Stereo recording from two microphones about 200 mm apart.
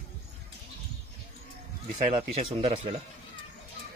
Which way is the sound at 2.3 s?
35° right (ahead or behind).